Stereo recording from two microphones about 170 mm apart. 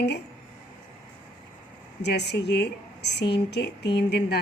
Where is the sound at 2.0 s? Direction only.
80° left.